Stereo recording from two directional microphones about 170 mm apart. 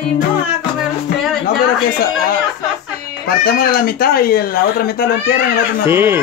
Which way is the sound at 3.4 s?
60° left (ahead or behind).